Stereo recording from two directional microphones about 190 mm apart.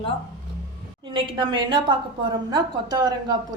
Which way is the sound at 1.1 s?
25° right (ahead or behind).